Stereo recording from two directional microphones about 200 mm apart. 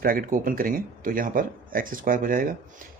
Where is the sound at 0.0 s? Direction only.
45° right (ahead or behind).